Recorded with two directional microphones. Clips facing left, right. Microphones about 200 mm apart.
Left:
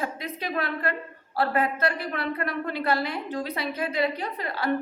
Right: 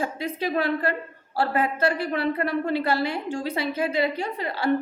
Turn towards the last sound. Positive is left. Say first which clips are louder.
# right 3 dB
turn(degrees=-30)  # may be behind; listen again after turning